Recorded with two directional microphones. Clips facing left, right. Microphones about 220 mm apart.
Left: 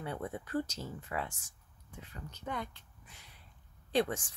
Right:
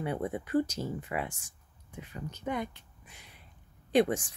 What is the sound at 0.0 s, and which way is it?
Speech, 15° right (ahead or behind).